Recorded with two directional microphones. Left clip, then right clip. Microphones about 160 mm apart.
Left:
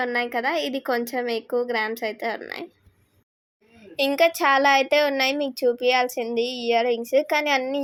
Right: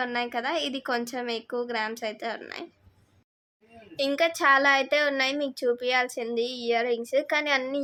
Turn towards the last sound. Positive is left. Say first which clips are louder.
# left 4 dB
turn(degrees=20)  # may be behind; listen again after turning